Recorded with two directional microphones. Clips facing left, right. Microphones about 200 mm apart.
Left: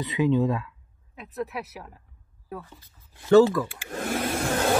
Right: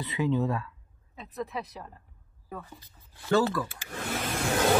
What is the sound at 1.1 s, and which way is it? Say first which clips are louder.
Speech: left 3 dB; 5° left (ahead or behind).